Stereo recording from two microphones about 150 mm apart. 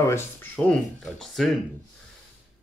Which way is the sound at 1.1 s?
Centre (ahead or behind).